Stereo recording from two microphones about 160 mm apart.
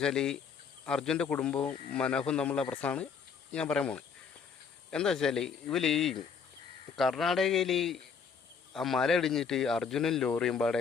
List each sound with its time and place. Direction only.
0.0 s a man's voice: 5° left (ahead or behind)